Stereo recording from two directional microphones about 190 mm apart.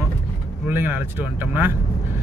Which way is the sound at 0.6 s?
10° right (ahead or behind).